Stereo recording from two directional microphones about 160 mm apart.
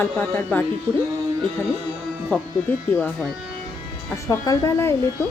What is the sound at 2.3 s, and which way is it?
Speech, 10° left (ahead or behind).